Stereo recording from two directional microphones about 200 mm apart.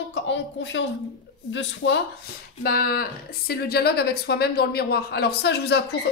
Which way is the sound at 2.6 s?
50° left (ahead or behind).